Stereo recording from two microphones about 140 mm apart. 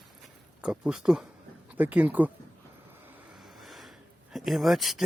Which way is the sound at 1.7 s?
10° right (ahead or behind).